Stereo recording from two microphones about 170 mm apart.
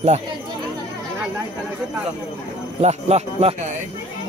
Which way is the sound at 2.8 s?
40° right (ahead or behind).